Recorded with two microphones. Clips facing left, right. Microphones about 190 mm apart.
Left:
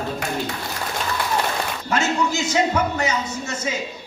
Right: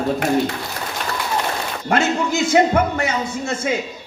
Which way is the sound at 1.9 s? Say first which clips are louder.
Right 3 dB; 55° right (ahead or behind).